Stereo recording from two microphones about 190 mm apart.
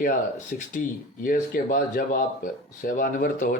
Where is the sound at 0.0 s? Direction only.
45° left (ahead or behind).